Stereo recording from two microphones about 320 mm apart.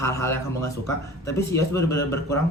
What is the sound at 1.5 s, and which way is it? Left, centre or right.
Speech, centre.